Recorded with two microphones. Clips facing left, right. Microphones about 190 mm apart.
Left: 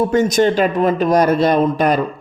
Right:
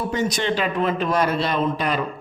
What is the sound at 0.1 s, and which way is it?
A man's voice, 50° left (ahead or behind).